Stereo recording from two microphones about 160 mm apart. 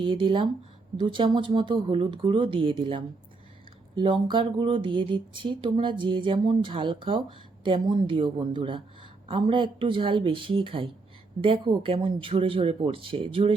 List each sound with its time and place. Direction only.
0.0 s speech: 30° right (ahead or behind)